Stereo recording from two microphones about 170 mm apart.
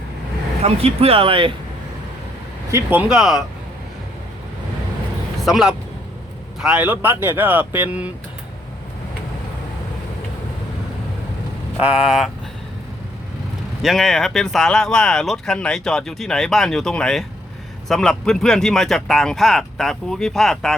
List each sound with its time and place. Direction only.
0.6 s speech: 35° right (ahead or behind)
2.7 s speech: 10° right (ahead or behind)
5.5 s speech: 5° right (ahead or behind)
11.8 s speech: 5° right (ahead or behind)
13.8 s speech: centre (ahead or behind)